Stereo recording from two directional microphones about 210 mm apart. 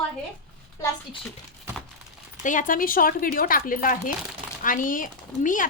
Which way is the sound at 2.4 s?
40° left (ahead or behind).